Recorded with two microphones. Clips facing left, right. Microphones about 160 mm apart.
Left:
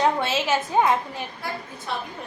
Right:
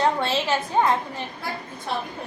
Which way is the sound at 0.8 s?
10° left (ahead or behind).